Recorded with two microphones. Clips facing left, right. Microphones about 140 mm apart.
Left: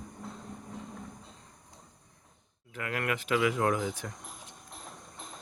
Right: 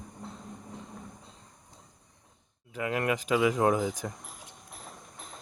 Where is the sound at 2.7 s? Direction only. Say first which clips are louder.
Right 4 dB; 20° right (ahead or behind).